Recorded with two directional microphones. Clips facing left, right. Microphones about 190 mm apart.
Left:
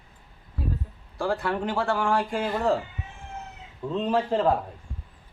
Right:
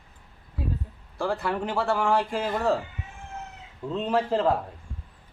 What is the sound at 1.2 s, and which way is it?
Speech, centre (ahead or behind).